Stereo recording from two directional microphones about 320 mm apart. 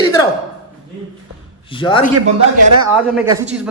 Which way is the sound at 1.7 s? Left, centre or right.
Centre.